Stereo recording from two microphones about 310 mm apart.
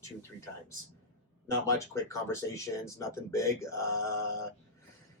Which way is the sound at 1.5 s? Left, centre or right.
Centre.